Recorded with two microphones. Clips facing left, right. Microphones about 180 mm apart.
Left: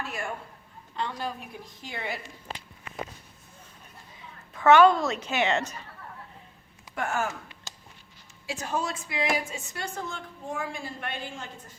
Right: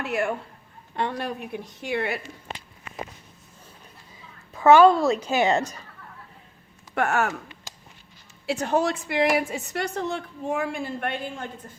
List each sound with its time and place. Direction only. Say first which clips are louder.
0.0 s a woman's voice: right 8 dB; 65° right (ahead or behind)
4.5 s a woman's voice: right 3 dB; 30° right (ahead or behind)
6.9 s speech: right 6 dB; 70° right (ahead or behind)
8.4 s a woman's voice: right 8 dB; 65° right (ahead or behind)